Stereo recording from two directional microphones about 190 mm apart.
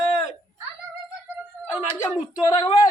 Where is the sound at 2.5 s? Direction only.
25° left (ahead or behind).